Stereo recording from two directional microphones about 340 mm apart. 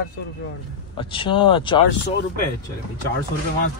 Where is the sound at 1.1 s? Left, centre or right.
Centre.